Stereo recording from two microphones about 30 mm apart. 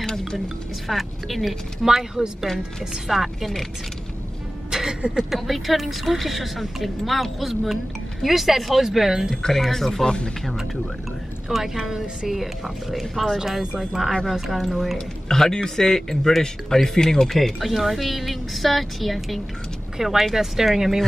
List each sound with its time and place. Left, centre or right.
0.8 s a woman's voice: centre
2.2 s speech: right
3.1 s speech: centre
4.6 s music: centre
5.3 s a woman's voice: centre
9.5 s a man's voice: centre
10.0 s speech: left
11.4 s a woman's voice: centre
15.2 s a man's voice: centre
17.3 s a woman's voice: centre
20.0 s speech: centre